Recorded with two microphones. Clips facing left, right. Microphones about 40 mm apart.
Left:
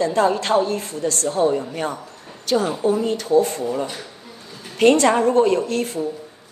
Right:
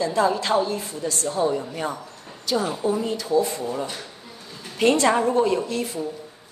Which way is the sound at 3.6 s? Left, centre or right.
Centre.